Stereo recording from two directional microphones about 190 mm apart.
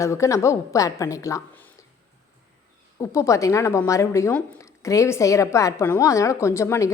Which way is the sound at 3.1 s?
15° left (ahead or behind).